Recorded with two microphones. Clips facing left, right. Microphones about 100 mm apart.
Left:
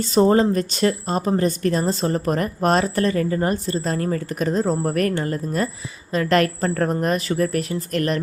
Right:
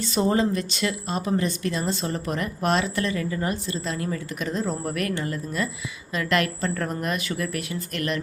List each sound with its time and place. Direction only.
0.0 s speech: 40° left (ahead or behind)